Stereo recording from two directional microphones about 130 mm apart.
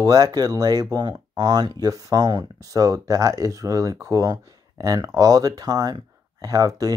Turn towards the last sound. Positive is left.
turn(degrees=-25)  # may be behind; listen again after turning